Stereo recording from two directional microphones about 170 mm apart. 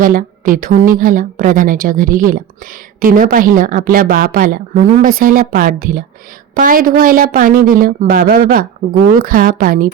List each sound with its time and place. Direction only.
0.0 s a woman's voice: 55° right (ahead or behind)